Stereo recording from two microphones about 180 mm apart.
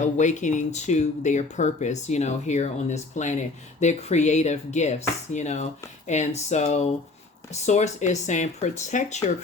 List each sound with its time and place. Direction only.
0.0 s speech: 40° left (ahead or behind)